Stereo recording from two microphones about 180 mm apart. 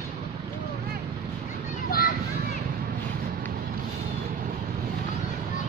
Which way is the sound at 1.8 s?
55° left (ahead or behind).